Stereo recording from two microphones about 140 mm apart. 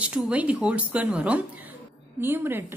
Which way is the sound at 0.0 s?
10° right (ahead or behind).